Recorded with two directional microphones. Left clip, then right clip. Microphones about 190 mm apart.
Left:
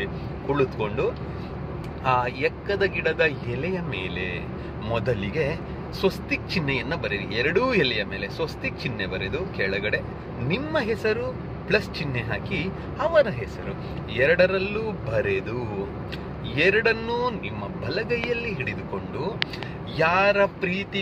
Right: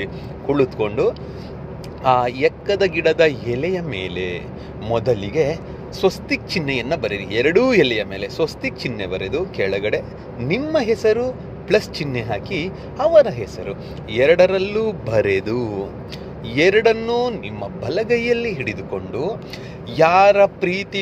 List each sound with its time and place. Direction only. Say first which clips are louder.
0.0 s speech: right 4 dB; 35° right (ahead or behind)
16.5 s speech: right 6 dB; 35° right (ahead or behind)